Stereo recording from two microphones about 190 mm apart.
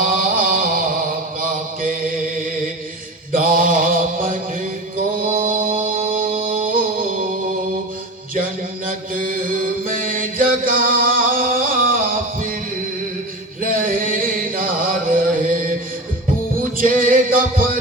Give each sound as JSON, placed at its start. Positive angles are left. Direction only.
{"t": 0.0, "sound": "a sound", "side_deg": -45}
{"t": 1.4, "sound": "mantra", "side_deg": -45}
{"t": 5.3, "sound": "music", "side_deg": -45}
{"t": 8.9, "sound": "chant", "side_deg": -45}
{"t": 13.7, "sound": "music", "side_deg": -45}
{"t": 16.7, "sound": "music", "side_deg": -45}